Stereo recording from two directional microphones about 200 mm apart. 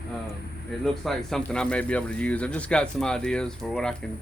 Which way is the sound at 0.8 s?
Centre (ahead or behind).